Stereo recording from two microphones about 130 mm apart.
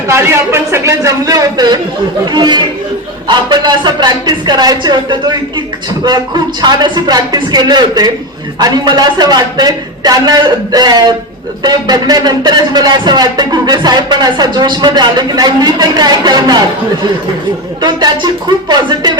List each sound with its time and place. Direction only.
0.1 s speech: 20° right (ahead or behind)